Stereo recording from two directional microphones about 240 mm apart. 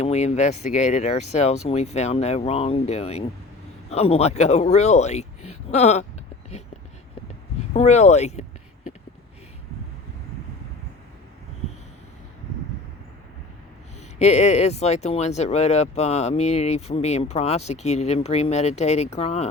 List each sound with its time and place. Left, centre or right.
0.0 s speech: left
7.7 s speech: left
14.2 s speech: left